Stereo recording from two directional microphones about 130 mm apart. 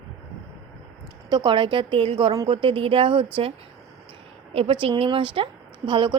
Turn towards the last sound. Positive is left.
turn(degrees=-40)  # may be behind; listen again after turning